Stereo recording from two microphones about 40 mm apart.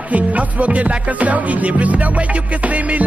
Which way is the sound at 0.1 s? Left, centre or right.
Right.